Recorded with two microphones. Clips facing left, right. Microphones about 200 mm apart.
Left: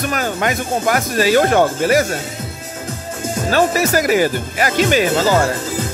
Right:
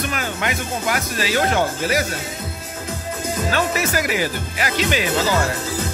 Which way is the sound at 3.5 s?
40° left (ahead or behind).